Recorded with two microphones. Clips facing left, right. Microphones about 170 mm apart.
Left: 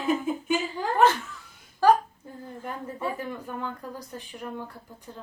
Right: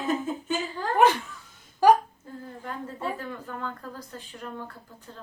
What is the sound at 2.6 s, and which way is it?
A woman's voice, 15° left (ahead or behind).